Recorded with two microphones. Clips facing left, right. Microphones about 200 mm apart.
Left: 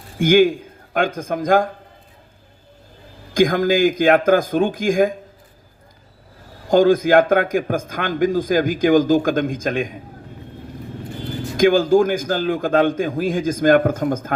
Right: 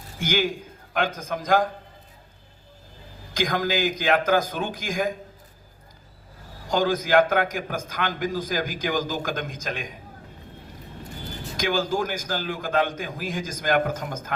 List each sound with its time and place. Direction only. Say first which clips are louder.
0.2 s a man's voice: left 12 dB; 55° left (ahead or behind)
3.3 s a man's voice: left 9 dB; 50° left (ahead or behind)
6.7 s a man's voice: left 9 dB; 50° left (ahead or behind)
11.5 s a man's voice: left 11 dB; 55° left (ahead or behind)